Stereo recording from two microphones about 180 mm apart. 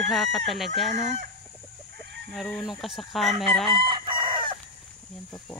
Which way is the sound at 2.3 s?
Centre (ahead or behind).